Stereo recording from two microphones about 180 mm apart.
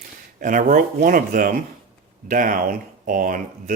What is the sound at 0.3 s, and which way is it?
Speech, 45° right (ahead or behind).